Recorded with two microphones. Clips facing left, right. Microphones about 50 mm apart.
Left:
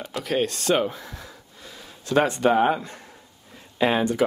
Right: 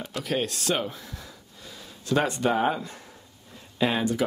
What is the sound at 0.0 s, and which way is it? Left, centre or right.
Speech, centre.